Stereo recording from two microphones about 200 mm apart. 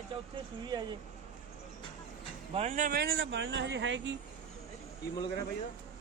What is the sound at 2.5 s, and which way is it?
Speech, 35° right (ahead or behind).